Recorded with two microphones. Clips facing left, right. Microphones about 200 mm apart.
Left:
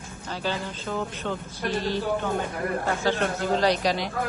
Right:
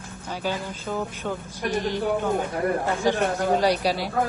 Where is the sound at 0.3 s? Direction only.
10° right (ahead or behind).